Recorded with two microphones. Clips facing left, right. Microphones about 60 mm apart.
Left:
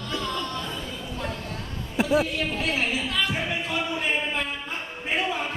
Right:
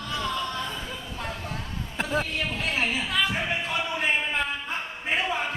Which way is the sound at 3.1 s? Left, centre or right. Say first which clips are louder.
Right 1 dB; centre.